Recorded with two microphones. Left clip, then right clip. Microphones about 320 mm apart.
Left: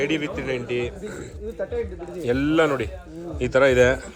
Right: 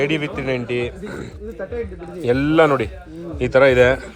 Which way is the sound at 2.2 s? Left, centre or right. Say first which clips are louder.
Right 5 dB; centre.